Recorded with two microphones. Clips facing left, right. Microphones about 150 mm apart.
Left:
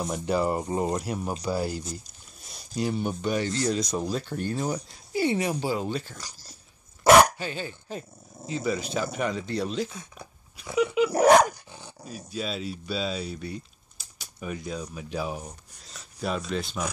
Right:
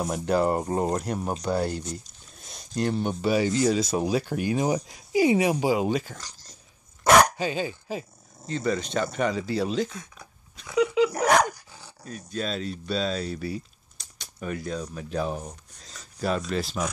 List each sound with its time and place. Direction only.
0.0 s speech: centre (ahead or behind)
6.1 s speech: 10° left (ahead or behind)
7.0 s dog: 5° left (ahead or behind)
7.3 s speech: 15° right (ahead or behind)
8.5 s speech: 5° left (ahead or behind)
11.1 s dog: 30° left (ahead or behind)
12.0 s speech: 5° left (ahead or behind)